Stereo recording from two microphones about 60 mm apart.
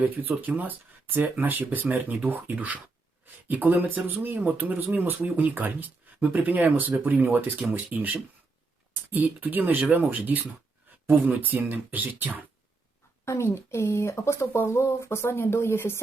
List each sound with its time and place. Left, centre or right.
0.0 s speech: right
13.4 s speech: left